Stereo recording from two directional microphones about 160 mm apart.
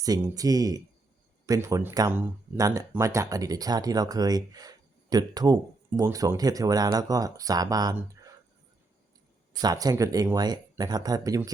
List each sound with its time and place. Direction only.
0.0 s speech: 20° right (ahead or behind)
9.5 s speech: 25° right (ahead or behind)